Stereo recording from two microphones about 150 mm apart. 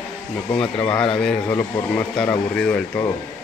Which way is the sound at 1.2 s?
10° left (ahead or behind).